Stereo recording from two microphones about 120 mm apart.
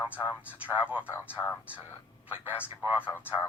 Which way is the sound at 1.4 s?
15° left (ahead or behind).